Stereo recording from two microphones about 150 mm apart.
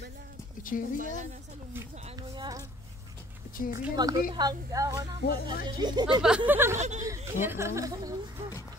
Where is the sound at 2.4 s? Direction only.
25° right (ahead or behind).